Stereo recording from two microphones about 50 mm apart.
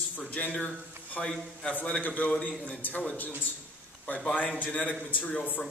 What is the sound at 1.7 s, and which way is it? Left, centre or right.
Speech, left.